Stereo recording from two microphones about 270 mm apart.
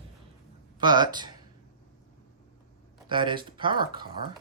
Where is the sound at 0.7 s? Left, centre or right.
Centre.